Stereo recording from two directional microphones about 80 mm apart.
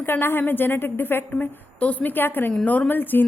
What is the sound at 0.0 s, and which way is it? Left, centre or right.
A woman's voice, left.